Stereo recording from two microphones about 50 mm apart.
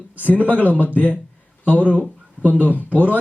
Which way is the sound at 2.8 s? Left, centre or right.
Right.